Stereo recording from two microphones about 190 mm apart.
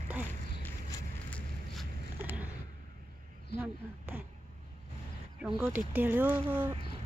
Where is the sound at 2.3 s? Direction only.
10° right (ahead or behind).